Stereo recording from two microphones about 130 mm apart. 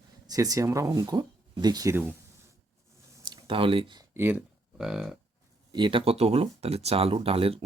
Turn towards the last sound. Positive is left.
turn(degrees=-45)  # may be behind; listen again after turning